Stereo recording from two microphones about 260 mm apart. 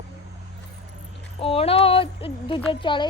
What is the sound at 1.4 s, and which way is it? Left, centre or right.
Speech, left.